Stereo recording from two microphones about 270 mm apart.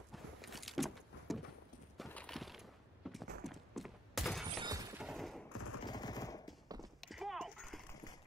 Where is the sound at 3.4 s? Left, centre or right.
Centre.